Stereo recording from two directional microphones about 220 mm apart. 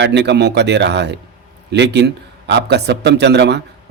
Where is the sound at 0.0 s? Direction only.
50° right (ahead or behind).